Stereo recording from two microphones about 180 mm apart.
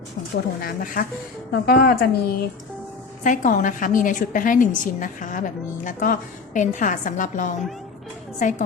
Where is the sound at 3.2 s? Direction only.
45° left (ahead or behind).